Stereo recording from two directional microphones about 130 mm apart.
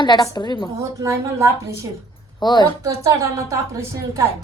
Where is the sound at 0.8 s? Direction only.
25° right (ahead or behind).